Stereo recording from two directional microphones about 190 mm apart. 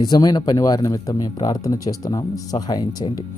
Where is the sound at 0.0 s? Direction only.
20° left (ahead or behind).